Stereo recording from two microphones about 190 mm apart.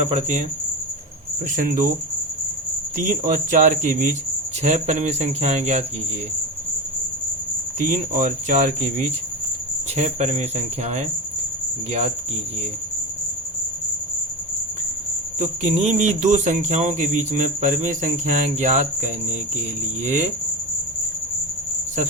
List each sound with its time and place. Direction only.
0.1 s speech: 35° right (ahead or behind)
1.5 s speech: 45° right (ahead or behind)
3.0 s speech: 40° right (ahead or behind)
7.8 s speech: 40° right (ahead or behind)
11.9 s speech: 35° right (ahead or behind)
15.4 s speech: 40° right (ahead or behind)